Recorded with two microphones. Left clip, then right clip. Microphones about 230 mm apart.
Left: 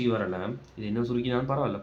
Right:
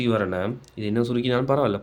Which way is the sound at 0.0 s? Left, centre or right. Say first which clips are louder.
Right 5 dB; right.